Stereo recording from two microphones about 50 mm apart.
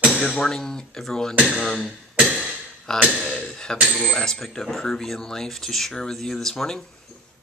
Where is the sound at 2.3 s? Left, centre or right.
Centre.